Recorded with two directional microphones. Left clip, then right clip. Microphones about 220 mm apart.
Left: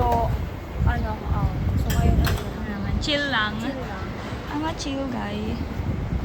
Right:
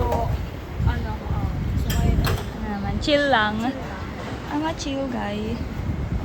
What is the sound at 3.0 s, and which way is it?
Speech, 5° left (ahead or behind).